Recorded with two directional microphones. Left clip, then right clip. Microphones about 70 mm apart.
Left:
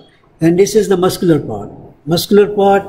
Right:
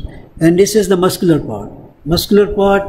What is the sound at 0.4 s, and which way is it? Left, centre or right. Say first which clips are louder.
Speech: even; right.